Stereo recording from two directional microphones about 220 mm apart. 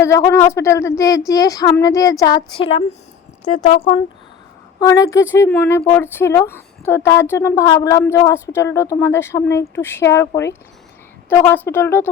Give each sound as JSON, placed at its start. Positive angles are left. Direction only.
{"t": 0.3, "sound": "speech", "side_deg": 10}
{"t": 4.8, "sound": "speech", "side_deg": 15}